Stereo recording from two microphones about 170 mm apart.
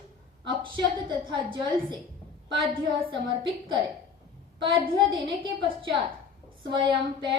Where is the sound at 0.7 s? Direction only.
25° right (ahead or behind).